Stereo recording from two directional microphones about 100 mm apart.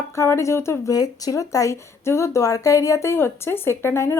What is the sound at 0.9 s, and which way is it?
Speech, 40° left (ahead or behind).